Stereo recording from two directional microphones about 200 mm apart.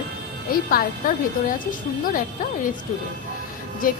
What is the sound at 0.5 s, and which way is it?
Speech, 45° left (ahead or behind).